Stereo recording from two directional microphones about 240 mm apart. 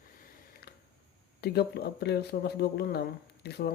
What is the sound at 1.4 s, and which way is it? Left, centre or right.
Speech, left.